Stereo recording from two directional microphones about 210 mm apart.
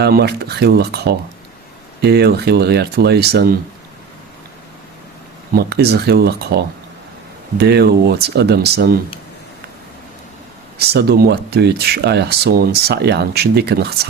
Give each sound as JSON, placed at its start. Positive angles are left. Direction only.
{"t": 0.0, "sound": "speech", "side_deg": -50}
{"t": 5.5, "sound": "speech", "side_deg": -50}
{"t": 7.6, "sound": "speech", "side_deg": -50}
{"t": 10.8, "sound": "speech", "side_deg": -50}